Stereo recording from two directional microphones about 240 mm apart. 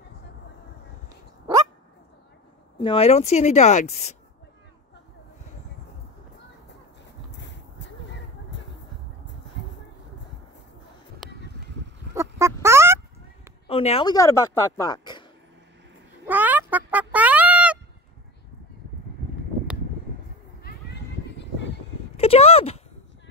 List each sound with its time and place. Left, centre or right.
2.8 s speech: left
7.2 s a sound: left
12.1 s fowl: centre
13.7 s speech: left
16.3 s duck: centre
22.1 s a sound: left